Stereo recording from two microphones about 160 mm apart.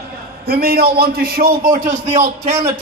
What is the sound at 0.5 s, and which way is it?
A man's voice, 75° right (ahead or behind).